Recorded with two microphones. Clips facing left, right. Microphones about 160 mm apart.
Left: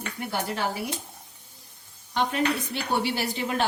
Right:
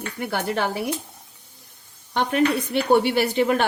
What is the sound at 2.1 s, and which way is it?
A woman's voice, 60° right (ahead or behind).